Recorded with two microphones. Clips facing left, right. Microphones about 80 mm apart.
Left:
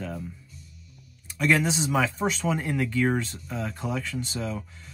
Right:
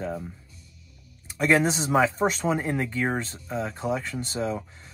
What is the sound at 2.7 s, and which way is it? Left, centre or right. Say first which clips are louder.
Speech: left 2 dB; right.